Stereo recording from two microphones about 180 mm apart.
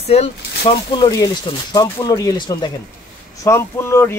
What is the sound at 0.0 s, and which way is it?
Speech, 35° left (ahead or behind).